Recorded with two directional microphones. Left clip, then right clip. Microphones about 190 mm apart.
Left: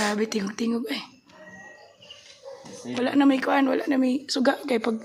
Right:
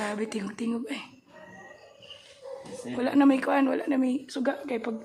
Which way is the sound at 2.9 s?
10° left (ahead or behind).